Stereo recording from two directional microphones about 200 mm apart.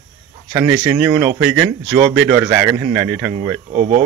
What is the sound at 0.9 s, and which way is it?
Speech, 5° right (ahead or behind).